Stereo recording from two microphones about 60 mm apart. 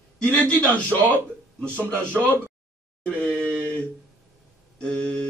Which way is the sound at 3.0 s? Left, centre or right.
Left.